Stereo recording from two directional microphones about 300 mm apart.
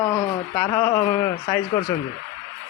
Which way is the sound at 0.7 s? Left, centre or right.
Left.